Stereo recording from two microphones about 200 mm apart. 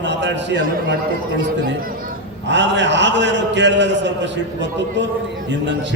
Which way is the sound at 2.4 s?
60° right (ahead or behind).